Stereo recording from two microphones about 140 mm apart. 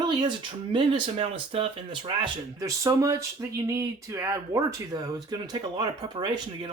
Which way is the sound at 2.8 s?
25° right (ahead or behind).